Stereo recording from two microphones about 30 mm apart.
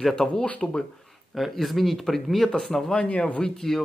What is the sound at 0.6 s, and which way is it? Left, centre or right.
Speech, left.